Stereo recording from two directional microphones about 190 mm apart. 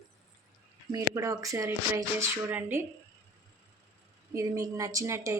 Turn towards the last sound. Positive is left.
turn(degrees=-15)  # may be behind; listen again after turning